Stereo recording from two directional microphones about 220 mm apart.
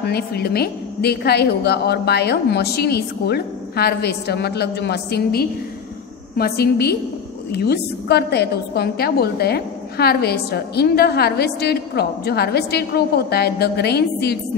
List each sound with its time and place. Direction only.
0.0 s a woman's voice: 45° left (ahead or behind)